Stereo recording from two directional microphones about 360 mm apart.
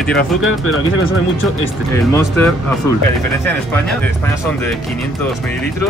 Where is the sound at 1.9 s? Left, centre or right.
Centre.